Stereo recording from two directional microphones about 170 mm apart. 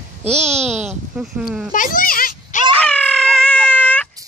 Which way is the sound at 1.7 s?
55° left (ahead or behind).